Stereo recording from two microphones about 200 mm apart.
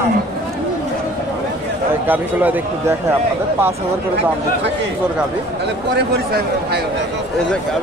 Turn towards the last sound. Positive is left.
turn(degrees=-55)  # may be behind; listen again after turning